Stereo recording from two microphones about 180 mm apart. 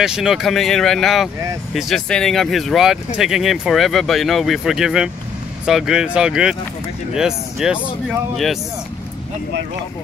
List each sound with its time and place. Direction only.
0.0 s speech: 5° right (ahead or behind)